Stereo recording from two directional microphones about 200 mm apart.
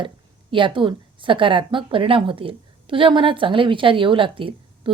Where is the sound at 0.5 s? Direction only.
25° right (ahead or behind).